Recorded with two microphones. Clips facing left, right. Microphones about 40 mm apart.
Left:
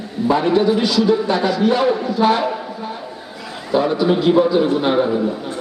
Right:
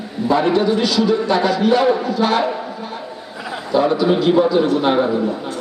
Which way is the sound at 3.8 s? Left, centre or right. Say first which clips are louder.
Right 1 dB; centre.